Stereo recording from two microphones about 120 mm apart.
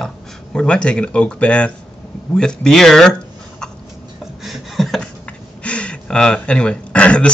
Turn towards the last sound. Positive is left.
turn(degrees=10)  # may be behind; listen again after turning